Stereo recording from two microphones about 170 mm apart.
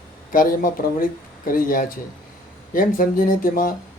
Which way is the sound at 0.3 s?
55° left (ahead or behind).